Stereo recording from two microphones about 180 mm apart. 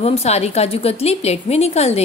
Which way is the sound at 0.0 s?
35° left (ahead or behind).